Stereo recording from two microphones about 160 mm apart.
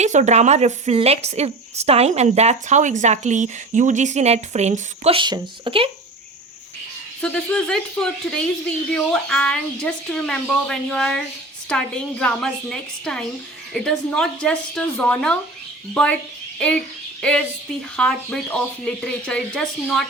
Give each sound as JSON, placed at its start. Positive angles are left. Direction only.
{"t": 0.0, "sound": "a woman's voice", "side_deg": -45}
{"t": 7.2, "sound": "speech", "side_deg": 5}